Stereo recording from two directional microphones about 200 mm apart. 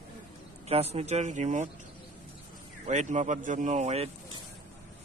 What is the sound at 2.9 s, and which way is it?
Speech, 35° right (ahead or behind).